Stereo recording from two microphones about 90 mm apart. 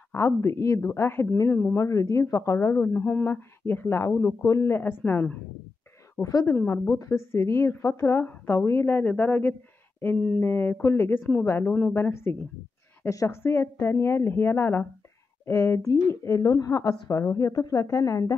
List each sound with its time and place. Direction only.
0.1 s a woman's voice: 30° left (ahead or behind)
6.2 s a woman's voice: 40° left (ahead or behind)
6.5 s a woman's voice: 25° left (ahead or behind)
6.9 s a woman's voice: 35° left (ahead or behind)